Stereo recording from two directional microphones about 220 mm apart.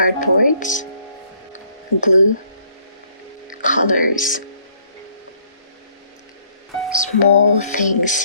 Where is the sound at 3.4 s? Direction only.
35° left (ahead or behind).